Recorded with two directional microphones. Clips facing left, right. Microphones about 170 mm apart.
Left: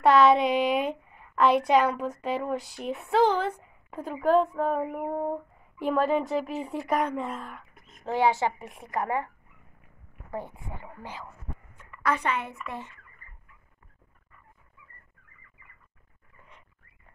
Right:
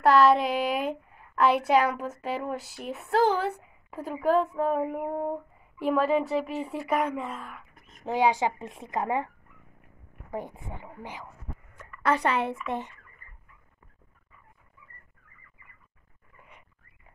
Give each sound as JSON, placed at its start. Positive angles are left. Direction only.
{"t": 0.0, "sound": "a woman's voice", "side_deg": 0}
{"t": 8.0, "sound": "speech", "side_deg": -15}
{"t": 10.3, "sound": "speech", "side_deg": -15}
{"t": 12.0, "sound": "a woman's voice", "side_deg": -30}
{"t": 12.6, "sound": "speech", "side_deg": -20}